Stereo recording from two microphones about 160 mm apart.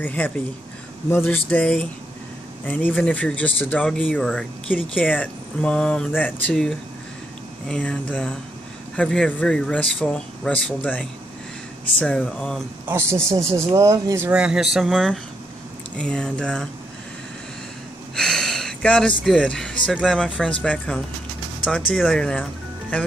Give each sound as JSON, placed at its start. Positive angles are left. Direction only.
{"t": 0.0, "sound": "speech", "side_deg": 10}
{"t": 12.8, "sound": "speech", "side_deg": -15}
{"t": 18.1, "sound": "a sound", "side_deg": 5}
{"t": 19.9, "sound": "speech", "side_deg": 0}